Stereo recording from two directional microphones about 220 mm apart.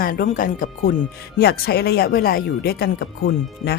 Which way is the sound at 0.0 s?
40° left (ahead or behind).